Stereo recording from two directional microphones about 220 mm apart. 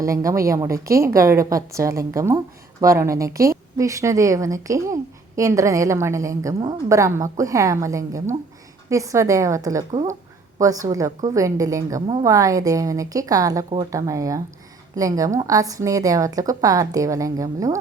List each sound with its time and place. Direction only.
0.0 s a woman's voice: 15° right (ahead or behind)